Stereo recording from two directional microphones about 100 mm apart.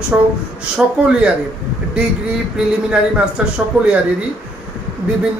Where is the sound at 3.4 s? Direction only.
10° right (ahead or behind).